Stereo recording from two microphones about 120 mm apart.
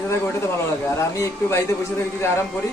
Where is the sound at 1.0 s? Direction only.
25° left (ahead or behind).